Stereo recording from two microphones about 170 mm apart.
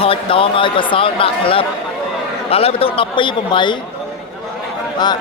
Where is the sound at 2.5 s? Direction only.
35° left (ahead or behind).